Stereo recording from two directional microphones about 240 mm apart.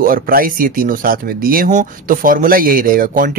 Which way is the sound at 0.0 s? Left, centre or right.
Right.